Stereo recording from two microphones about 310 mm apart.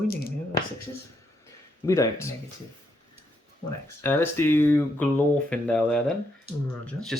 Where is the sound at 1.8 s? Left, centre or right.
Centre.